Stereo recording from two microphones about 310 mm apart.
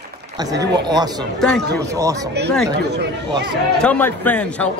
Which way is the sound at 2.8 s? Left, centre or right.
Right.